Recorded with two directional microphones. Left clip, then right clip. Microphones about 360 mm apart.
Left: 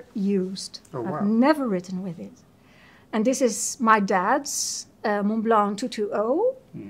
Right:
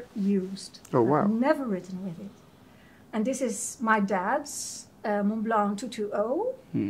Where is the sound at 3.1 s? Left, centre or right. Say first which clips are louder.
Left 7 dB; left.